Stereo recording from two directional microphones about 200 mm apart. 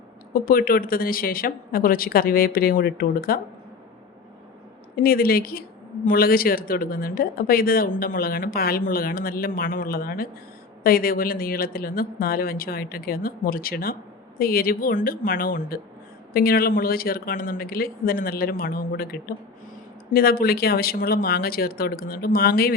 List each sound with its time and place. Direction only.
0.3 s speech: 45° left (ahead or behind)
4.9 s speech: 45° left (ahead or behind)